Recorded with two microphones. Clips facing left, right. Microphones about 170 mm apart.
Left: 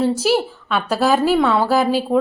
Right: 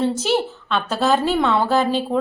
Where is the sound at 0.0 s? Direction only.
5° left (ahead or behind).